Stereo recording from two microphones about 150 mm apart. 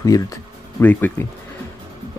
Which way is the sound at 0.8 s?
10° left (ahead or behind).